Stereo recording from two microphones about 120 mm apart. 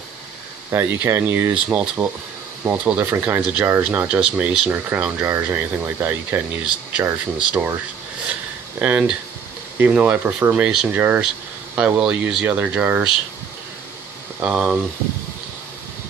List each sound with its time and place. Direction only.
0.7 s speech: 20° right (ahead or behind)
8.7 s speech: 15° right (ahead or behind)
14.4 s speech: 10° right (ahead or behind)